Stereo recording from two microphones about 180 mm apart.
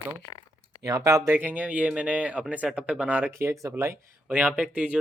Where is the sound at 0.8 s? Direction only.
20° right (ahead or behind).